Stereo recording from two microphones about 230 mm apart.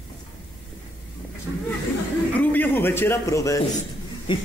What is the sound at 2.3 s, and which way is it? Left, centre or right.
A man's voice, centre.